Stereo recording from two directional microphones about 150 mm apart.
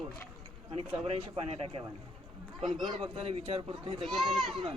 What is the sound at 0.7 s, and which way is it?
Speech, 40° right (ahead or behind).